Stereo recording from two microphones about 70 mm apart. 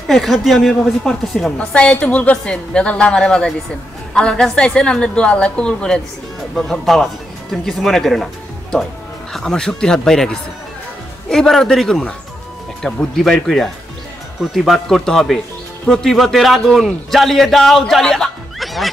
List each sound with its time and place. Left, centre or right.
0.1 s a man's voice: centre
1.6 s a woman's voice: centre
9.3 s a woman's voice: centre